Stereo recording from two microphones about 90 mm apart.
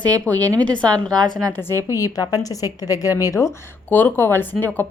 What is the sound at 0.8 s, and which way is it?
Speech, 45° right (ahead or behind).